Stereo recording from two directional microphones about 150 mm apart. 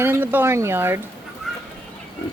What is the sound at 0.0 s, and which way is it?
Speech, 15° right (ahead or behind).